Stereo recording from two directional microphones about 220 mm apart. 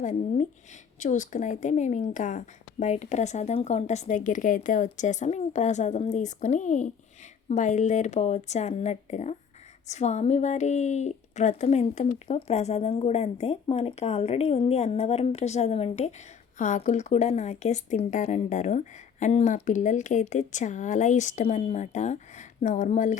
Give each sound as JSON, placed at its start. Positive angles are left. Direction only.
{"t": 0.0, "sound": "a woman's voice", "side_deg": 35}